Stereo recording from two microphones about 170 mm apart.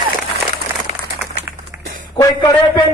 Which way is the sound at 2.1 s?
25° left (ahead or behind).